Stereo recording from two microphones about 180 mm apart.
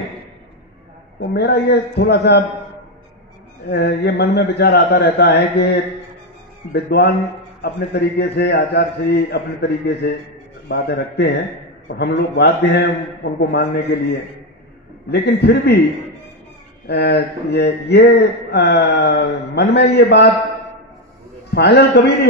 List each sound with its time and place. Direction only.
1.2 s speech: 70° left (ahead or behind)
3.6 s speech: 65° left (ahead or behind)
16.8 s speech: 65° left (ahead or behind)
21.5 s speech: 65° left (ahead or behind)